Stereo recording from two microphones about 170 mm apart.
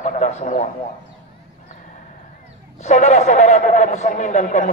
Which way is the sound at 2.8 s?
40° left (ahead or behind).